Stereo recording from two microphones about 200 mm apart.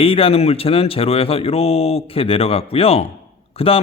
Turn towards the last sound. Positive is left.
turn(degrees=30)  # may be behind; listen again after turning